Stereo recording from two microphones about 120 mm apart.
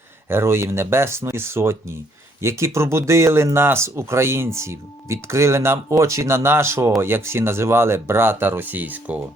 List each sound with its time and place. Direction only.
0.3 s speech: 20° right (ahead or behind)